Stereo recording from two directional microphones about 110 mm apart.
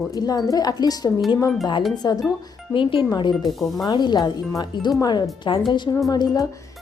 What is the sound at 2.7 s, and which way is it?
Speech, 50° left (ahead or behind).